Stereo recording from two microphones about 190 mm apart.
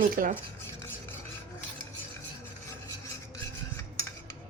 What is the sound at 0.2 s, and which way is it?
Speech, 50° right (ahead or behind).